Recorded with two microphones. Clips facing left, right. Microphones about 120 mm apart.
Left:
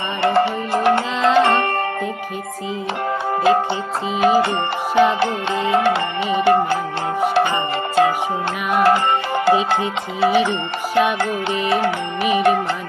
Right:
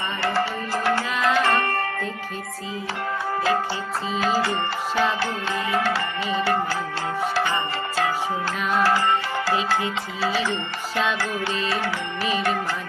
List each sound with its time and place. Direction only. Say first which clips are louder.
0.2 s music: left 8 dB; 20° left (ahead or behind)
4.2 s music: left 8 dB; 20° left (ahead or behind)
8.7 s music: left 6 dB; 55° left (ahead or behind)
9.3 s music: left 7 dB; 20° left (ahead or behind)